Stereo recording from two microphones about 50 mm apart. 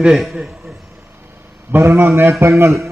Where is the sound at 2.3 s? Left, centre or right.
Right.